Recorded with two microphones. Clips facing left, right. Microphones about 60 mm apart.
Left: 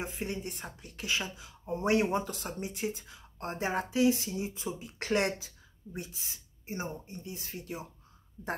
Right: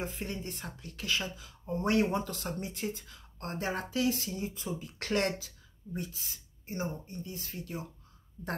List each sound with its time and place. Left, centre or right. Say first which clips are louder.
0.0 s speech: left 1 dB; centre